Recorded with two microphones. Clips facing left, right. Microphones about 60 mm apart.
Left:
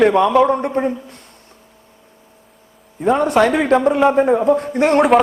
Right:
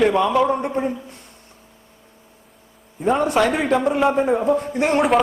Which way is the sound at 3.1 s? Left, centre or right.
Left.